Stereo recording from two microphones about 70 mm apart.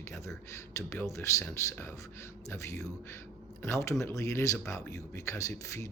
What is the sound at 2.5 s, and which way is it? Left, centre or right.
Speech, left.